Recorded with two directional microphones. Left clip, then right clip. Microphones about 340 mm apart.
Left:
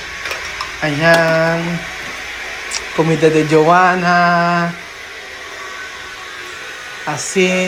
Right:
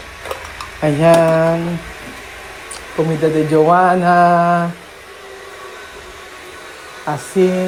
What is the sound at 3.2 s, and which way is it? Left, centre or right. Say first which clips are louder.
Mantra: left 1 dB; centre.